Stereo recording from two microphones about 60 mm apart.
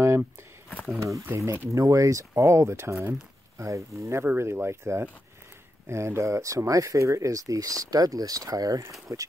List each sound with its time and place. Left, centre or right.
0.9 s speech: right
3.5 s speech: right
9.1 s speech: right